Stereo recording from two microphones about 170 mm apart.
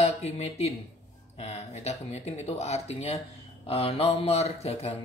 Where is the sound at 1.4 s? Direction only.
40° left (ahead or behind).